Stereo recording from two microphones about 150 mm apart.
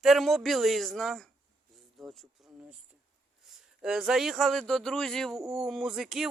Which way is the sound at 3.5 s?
5° right (ahead or behind).